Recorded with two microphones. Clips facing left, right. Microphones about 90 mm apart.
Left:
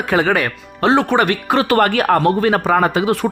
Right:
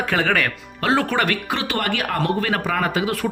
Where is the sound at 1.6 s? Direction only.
45° left (ahead or behind).